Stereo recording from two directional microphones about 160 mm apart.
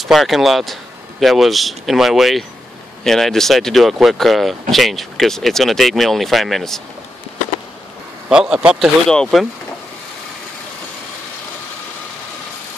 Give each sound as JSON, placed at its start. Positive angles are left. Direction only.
{"t": 0.0, "sound": "speech", "side_deg": 0}
{"t": 8.3, "sound": "speech", "side_deg": -5}